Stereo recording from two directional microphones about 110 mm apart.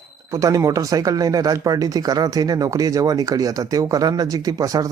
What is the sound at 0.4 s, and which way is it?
Speech, 30° right (ahead or behind).